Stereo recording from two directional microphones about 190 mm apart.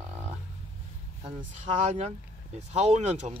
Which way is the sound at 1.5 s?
35° right (ahead or behind).